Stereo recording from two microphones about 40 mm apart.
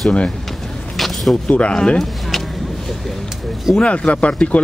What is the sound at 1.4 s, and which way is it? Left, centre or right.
Speech, left.